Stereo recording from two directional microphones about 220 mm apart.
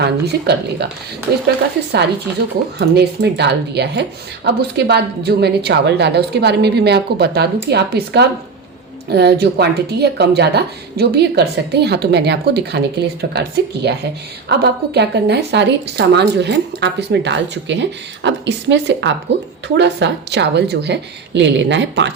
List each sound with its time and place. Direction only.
0.0 s speech: 50° right (ahead or behind)
2.7 s speech: 50° right (ahead or behind)